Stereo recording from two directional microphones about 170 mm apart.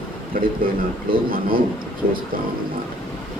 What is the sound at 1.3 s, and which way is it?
Speech, 60° right (ahead or behind).